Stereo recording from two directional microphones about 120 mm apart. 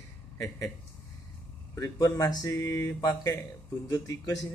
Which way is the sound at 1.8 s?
30° left (ahead or behind).